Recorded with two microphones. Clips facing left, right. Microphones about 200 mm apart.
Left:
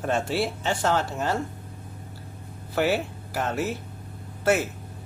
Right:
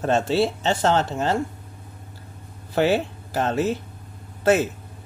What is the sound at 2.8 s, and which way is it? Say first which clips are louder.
Speech: right 4 dB; 25° right (ahead or behind).